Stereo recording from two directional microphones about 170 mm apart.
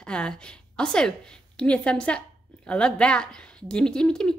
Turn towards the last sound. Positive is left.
turn(degrees=5)  # may be behind; listen again after turning